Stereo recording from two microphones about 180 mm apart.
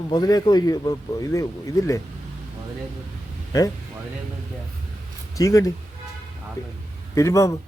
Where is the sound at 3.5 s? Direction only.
20° left (ahead or behind).